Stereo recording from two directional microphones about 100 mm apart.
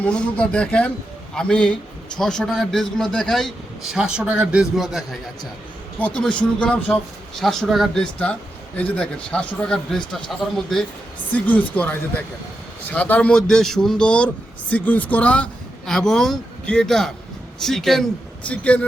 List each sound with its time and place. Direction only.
0.0 s a man's voice: 10° left (ahead or behind)
3.9 s a man's voice: 10° right (ahead or behind)
6.1 s a man's voice: 10° left (ahead or behind)
8.2 s a man's voice: 10° left (ahead or behind)
11.3 s a man's voice: 15° left (ahead or behind)